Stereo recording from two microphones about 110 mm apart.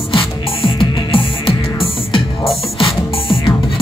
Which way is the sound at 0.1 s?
55° left (ahead or behind).